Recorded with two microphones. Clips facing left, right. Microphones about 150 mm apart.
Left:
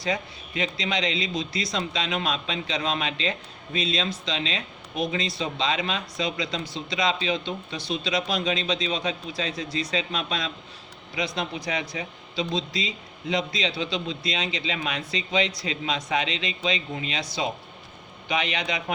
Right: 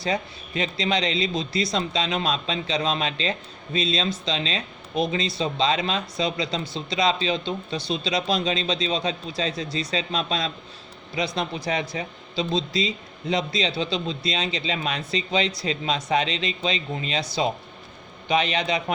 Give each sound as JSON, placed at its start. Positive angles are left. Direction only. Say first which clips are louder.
{"t": 0.0, "sound": "a man's voice", "louder": "right 2 dB", "side_deg": -35}